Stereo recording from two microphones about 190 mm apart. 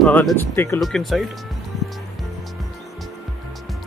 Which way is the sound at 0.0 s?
5° left (ahead or behind).